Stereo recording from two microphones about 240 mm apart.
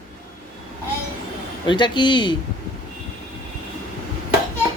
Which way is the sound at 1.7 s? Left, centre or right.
Centre.